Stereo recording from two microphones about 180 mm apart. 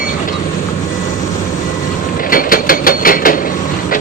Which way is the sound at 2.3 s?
50° left (ahead or behind).